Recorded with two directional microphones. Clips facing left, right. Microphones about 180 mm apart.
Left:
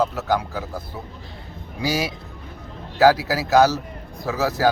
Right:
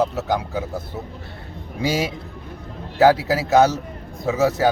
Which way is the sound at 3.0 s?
25° right (ahead or behind).